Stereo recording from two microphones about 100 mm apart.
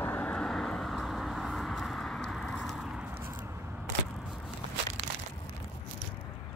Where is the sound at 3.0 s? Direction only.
20° right (ahead or behind).